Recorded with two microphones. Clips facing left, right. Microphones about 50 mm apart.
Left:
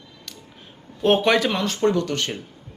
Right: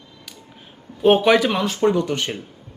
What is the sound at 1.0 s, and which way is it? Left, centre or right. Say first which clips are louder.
Speech: right 3 dB; centre.